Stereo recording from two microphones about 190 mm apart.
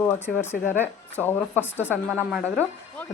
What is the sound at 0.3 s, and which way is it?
Speech, 10° left (ahead or behind).